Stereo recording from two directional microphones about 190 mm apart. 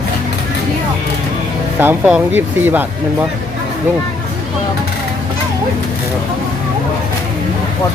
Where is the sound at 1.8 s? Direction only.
10° right (ahead or behind).